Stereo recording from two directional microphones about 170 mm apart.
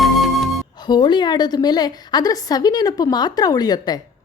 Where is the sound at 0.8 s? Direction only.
25° left (ahead or behind).